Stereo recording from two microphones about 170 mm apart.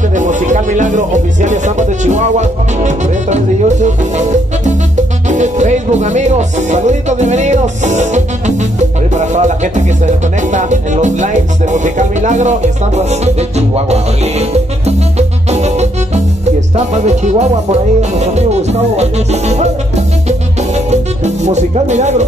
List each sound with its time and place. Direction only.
0.1 s music: 45° right (ahead or behind)